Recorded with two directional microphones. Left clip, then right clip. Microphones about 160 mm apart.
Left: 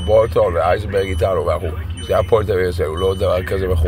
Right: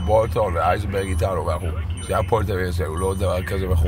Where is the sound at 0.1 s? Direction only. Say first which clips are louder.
Left 5 dB; 5° right (ahead or behind).